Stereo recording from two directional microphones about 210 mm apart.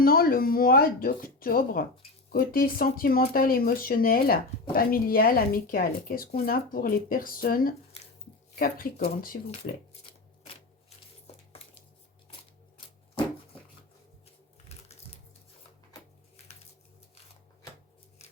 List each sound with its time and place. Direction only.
0.0 s speech: 45° left (ahead or behind)
10.4 s typewriter: 25° left (ahead or behind)
14.7 s typing: 30° left (ahead or behind)